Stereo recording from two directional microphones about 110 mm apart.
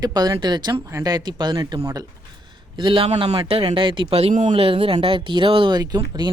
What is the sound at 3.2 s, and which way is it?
Speech, 60° right (ahead or behind).